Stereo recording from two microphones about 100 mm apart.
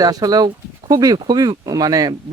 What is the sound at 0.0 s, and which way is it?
Speech, 40° right (ahead or behind).